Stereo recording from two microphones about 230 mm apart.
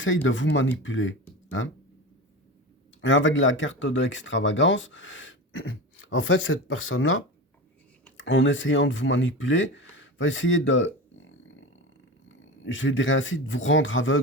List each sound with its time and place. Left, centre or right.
0.0 s speech: left
3.0 s speech: left